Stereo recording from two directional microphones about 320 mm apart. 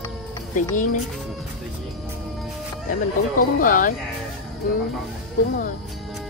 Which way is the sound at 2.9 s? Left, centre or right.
Left.